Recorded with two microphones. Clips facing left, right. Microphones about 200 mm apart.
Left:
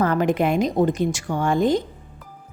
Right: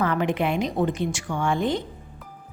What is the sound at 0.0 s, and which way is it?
A woman's voice, 40° left (ahead or behind).